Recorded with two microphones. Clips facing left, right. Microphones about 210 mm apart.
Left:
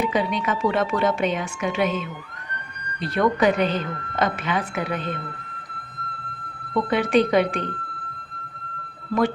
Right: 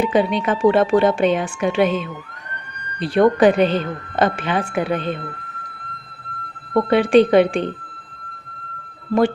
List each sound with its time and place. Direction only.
0.0 s speech: 30° right (ahead or behind)
3.2 s speech: 30° right (ahead or behind)
6.9 s speech: 30° right (ahead or behind)